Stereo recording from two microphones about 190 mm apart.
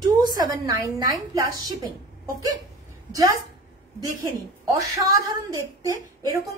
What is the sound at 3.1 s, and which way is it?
A woman's voice, 15° right (ahead or behind).